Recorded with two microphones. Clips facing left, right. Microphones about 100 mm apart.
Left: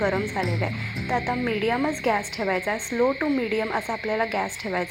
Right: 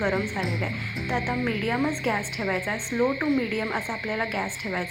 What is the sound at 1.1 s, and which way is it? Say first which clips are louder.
Speech: left 3 dB; 15° left (ahead or behind).